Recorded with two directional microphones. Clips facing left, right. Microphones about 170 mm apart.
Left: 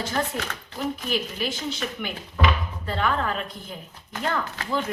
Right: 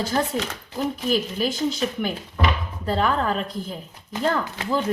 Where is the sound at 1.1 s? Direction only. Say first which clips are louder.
Right 4 dB; 40° right (ahead or behind).